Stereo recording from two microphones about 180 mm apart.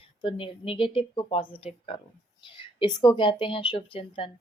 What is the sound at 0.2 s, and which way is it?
A woman's voice, 30° left (ahead or behind).